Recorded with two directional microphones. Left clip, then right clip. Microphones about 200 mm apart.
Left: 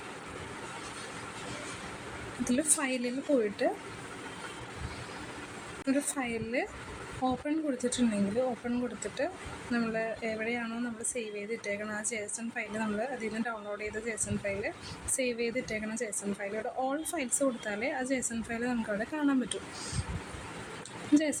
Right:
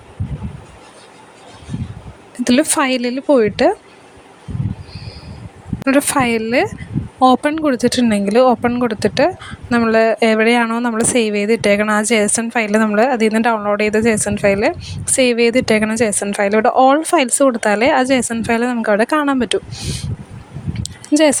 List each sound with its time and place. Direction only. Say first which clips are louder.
2.4 s a woman's voice: right 17 dB; 45° right (ahead or behind)
5.8 s a woman's voice: right 19 dB; 45° right (ahead or behind)
21.1 s speech: right 16 dB; 50° right (ahead or behind)